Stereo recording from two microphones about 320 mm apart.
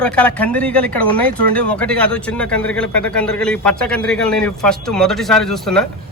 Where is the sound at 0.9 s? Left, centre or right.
Left.